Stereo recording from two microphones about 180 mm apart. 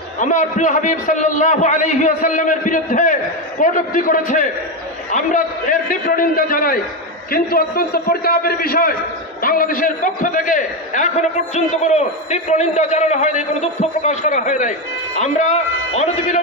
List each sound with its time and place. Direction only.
0.2 s a man's voice: 45° left (ahead or behind)